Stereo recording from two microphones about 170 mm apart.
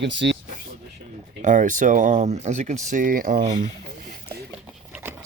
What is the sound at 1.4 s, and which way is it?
Speech, 50° right (ahead or behind).